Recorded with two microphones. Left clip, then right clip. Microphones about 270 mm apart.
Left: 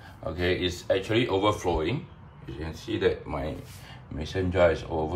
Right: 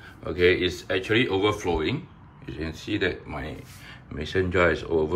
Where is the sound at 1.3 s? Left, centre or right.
Left.